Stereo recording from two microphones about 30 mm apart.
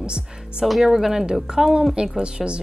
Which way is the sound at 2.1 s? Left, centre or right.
Right.